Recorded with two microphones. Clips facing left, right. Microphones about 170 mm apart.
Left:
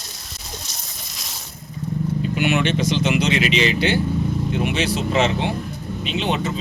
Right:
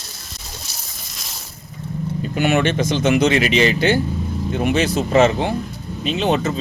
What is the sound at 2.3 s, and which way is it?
Speech, 45° right (ahead or behind).